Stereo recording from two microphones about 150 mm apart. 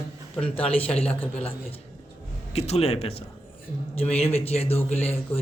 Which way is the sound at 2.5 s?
45° left (ahead or behind).